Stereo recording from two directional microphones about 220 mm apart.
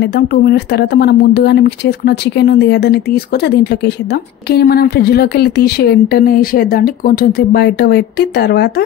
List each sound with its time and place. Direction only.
0.0 s speech: 50° left (ahead or behind)